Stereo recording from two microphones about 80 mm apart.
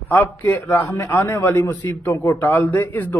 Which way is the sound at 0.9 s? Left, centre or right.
Left.